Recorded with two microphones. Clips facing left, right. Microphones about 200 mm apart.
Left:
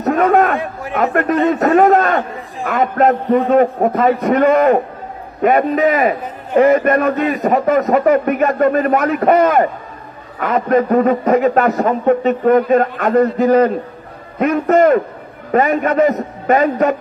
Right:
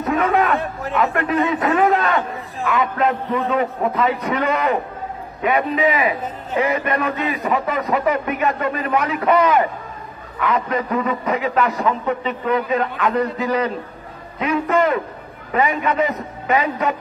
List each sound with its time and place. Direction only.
0.0 s a man's voice: 50° left (ahead or behind)